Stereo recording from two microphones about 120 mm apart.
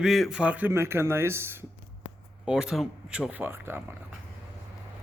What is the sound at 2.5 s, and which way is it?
Speech, 5° right (ahead or behind).